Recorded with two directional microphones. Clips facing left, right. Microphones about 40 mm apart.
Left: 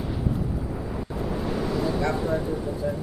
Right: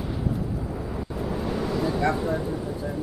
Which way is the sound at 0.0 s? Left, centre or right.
Centre.